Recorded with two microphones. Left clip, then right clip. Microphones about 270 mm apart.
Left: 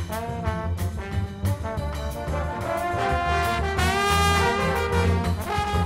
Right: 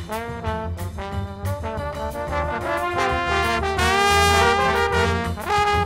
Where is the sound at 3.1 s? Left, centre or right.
Right.